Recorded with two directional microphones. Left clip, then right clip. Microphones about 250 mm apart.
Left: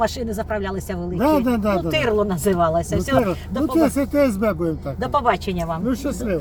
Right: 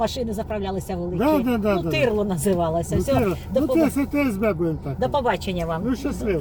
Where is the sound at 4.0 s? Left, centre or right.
Left.